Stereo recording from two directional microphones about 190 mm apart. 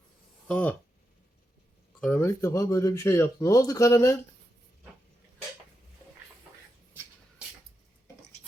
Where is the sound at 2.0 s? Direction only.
10° left (ahead or behind).